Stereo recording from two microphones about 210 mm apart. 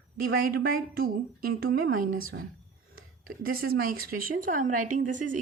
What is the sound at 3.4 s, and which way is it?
A woman's voice, 45° right (ahead or behind).